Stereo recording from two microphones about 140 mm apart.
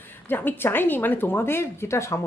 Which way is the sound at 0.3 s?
15° left (ahead or behind).